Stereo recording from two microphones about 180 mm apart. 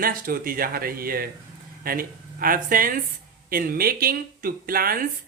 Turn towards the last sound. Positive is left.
turn(degrees=-55)  # may be behind; listen again after turning